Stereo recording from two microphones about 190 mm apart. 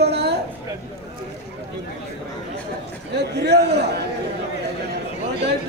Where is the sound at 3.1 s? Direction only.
60° right (ahead or behind).